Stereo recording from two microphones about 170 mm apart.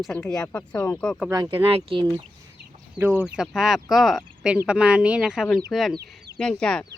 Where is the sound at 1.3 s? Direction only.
20° right (ahead or behind).